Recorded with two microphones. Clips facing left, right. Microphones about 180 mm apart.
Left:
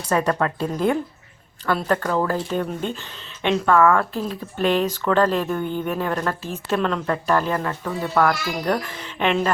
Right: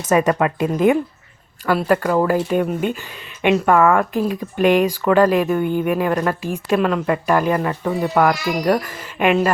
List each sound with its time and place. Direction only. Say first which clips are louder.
0.0 s speech: right 5 dB; 20° right (ahead or behind)